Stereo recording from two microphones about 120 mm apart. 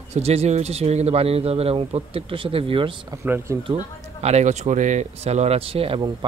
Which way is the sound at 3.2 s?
20° right (ahead or behind).